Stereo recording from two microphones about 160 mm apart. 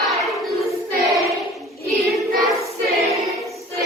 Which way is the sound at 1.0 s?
Centre (ahead or behind).